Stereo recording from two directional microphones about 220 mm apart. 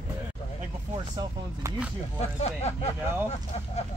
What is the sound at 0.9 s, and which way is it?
Speech, 15° right (ahead or behind).